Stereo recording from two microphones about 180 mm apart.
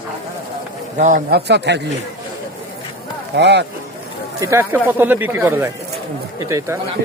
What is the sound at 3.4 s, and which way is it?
Speech, 70° right (ahead or behind).